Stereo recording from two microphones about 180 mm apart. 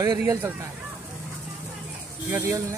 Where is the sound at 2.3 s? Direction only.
15° right (ahead or behind).